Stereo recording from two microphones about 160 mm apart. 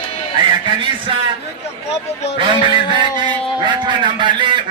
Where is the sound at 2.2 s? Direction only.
40° left (ahead or behind).